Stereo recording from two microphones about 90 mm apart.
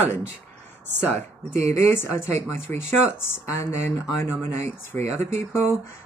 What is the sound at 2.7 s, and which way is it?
Speech, 25° left (ahead or behind).